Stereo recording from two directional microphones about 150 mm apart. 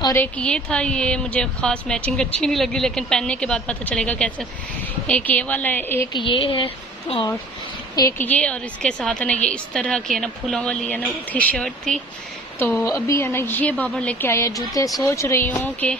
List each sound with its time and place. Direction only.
0.1 s a woman's voice: 10° left (ahead or behind)
6.1 s a woman's voice: 35° left (ahead or behind)
8.2 s a woman's voice: 10° left (ahead or behind)
12.8 s a woman's voice: 20° left (ahead or behind)